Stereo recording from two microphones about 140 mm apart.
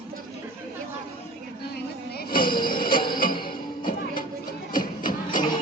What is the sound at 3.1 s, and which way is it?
Music, 90° left.